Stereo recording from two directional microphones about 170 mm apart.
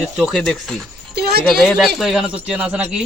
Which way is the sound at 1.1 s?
65° right (ahead or behind).